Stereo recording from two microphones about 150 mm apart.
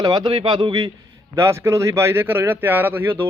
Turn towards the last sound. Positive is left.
turn(degrees=-15)  # may be behind; listen again after turning